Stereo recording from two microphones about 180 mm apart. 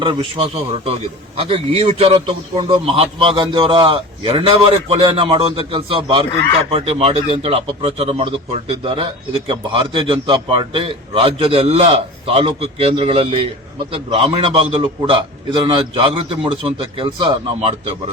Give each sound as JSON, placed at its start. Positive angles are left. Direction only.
{"t": 0.0, "sound": "a man's voice", "side_deg": -30}